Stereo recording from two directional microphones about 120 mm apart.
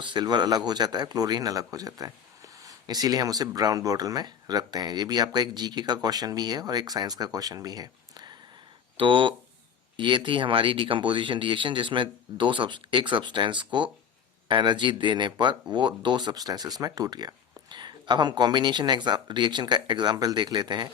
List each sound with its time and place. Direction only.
0.0 s speech: 40° right (ahead or behind)